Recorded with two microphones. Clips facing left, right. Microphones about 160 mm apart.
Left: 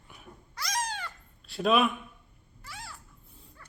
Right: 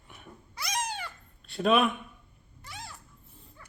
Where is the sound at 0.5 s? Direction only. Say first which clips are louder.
Even; 10° right (ahead or behind).